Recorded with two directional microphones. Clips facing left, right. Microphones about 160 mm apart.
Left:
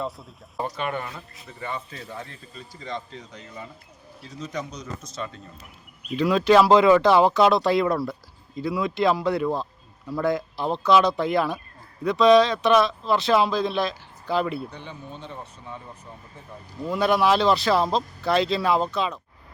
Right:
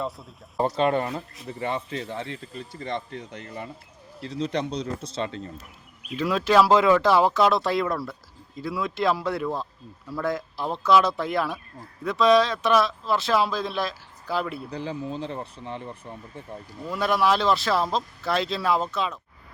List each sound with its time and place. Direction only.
0.0 s speech: centre (ahead or behind)
0.6 s speech: 30° right (ahead or behind)
2.1 s speech: 70° right (ahead or behind)
4.7 s speech: 30° right (ahead or behind)
5.2 s speech: 90° right
6.1 s speech: centre (ahead or behind)
14.8 s speech: 90° right
16.9 s speech: centre (ahead or behind)